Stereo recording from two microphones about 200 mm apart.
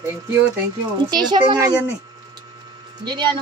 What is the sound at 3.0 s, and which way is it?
Speech, 20° right (ahead or behind).